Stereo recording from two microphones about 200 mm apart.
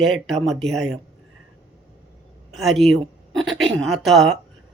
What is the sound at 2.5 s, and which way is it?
Speech, centre (ahead or behind).